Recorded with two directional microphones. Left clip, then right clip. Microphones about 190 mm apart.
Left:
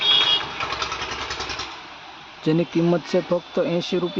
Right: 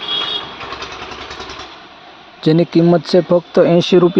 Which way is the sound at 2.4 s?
30° right (ahead or behind).